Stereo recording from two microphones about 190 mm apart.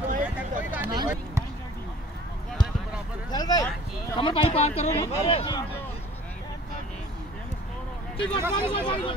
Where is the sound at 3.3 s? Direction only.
20° left (ahead or behind).